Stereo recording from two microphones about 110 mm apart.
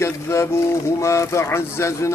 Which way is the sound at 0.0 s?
25° left (ahead or behind).